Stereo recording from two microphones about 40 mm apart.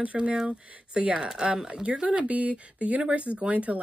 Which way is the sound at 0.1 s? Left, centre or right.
Centre.